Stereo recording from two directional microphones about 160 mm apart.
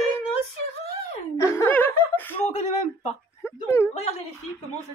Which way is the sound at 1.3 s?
20° left (ahead or behind).